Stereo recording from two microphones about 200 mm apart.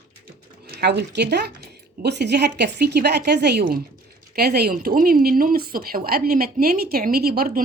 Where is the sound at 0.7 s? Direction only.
55° right (ahead or behind).